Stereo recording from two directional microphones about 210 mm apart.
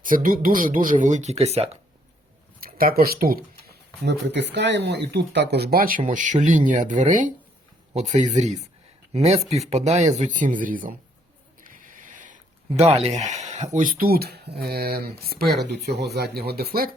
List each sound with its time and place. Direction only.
0.0 s speech: 40° right (ahead or behind)
2.6 s speech: 45° right (ahead or behind)
11.6 s a sound: 40° right (ahead or behind)
13.7 s speech: 40° right (ahead or behind)